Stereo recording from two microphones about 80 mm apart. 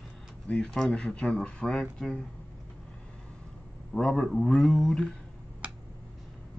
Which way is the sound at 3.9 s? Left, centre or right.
Centre.